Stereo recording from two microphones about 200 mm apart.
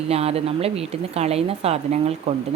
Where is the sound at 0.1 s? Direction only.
30° right (ahead or behind).